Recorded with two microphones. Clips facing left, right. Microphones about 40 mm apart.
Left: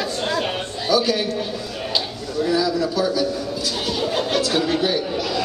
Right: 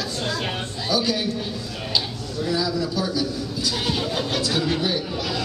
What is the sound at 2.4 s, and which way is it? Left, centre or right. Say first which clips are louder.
Speech: left 4 dB; centre.